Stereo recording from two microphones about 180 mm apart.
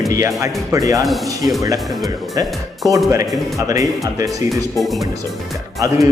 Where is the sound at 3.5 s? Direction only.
20° right (ahead or behind).